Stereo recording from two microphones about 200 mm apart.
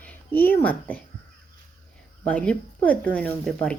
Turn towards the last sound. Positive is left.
turn(degrees=5)  # may be behind; listen again after turning